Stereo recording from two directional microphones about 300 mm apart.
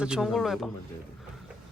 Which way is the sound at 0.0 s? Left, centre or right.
Centre.